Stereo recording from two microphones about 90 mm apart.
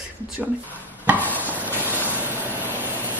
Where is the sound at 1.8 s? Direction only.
20° right (ahead or behind).